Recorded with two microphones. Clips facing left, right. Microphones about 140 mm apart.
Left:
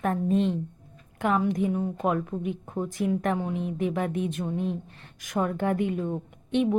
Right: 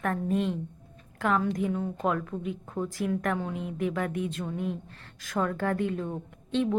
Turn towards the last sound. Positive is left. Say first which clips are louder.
# left 3 dB
turn(degrees=20)  # may be behind; listen again after turning